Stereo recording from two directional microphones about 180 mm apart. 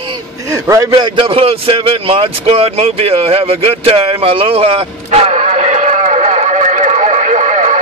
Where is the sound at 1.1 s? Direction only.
30° right (ahead or behind).